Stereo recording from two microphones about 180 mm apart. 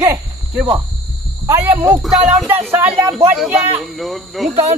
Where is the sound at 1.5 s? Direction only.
15° right (ahead or behind).